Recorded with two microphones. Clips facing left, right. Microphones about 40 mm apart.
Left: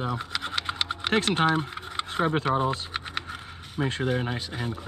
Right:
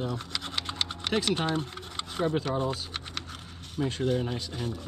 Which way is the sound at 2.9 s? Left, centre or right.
Left.